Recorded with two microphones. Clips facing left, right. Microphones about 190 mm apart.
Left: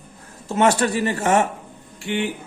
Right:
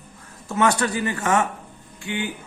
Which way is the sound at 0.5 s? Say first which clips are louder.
Left 3 dB; 25° left (ahead or behind).